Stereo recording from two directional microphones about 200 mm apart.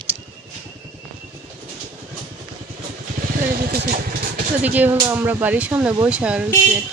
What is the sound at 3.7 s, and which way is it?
Speech, 45° right (ahead or behind).